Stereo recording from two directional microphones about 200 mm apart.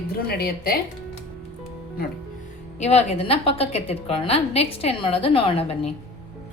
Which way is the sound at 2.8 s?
30° left (ahead or behind).